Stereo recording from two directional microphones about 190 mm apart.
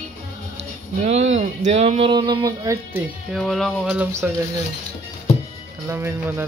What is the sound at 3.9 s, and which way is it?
Speech, 10° right (ahead or behind).